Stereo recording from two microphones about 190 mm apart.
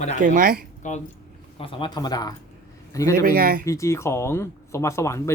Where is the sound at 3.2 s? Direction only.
50° right (ahead or behind).